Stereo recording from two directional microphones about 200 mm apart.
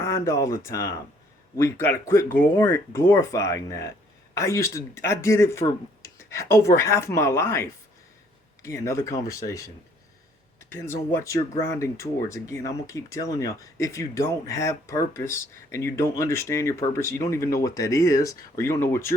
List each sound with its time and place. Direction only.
0.0 s speech: 15° left (ahead or behind)